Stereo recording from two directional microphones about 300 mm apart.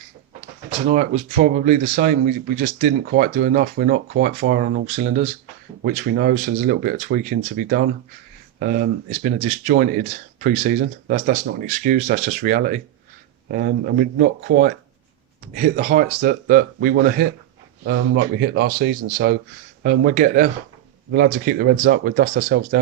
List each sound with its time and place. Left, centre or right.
1.5 s speech: right